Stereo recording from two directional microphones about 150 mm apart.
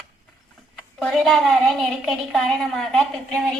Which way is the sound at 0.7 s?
5° left (ahead or behind).